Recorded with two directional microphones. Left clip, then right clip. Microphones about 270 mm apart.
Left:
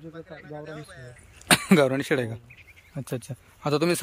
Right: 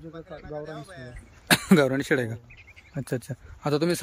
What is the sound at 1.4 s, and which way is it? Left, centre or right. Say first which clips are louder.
Speech: left 1 dB; centre.